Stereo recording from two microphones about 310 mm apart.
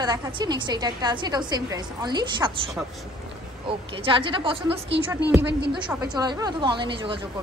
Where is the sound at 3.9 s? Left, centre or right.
Centre.